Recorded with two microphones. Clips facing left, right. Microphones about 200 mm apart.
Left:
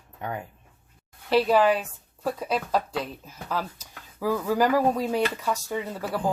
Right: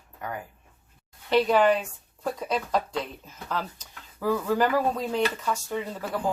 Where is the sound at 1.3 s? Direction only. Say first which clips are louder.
Even; 5° left (ahead or behind).